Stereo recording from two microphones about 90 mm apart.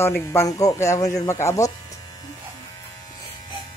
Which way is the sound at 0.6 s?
40° left (ahead or behind).